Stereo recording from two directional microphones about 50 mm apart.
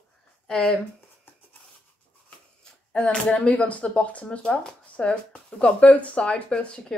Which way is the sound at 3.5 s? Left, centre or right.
Left.